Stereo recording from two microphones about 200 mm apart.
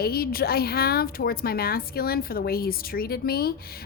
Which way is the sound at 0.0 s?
50° left (ahead or behind).